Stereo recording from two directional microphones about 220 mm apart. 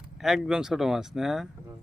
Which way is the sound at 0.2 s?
Centre (ahead or behind).